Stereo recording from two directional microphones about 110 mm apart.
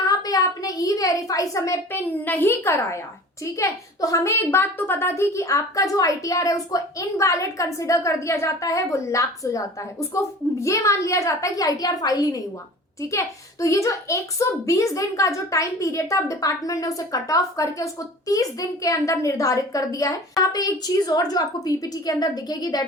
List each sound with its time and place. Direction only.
0.1 s a child's voice: 35° left (ahead or behind)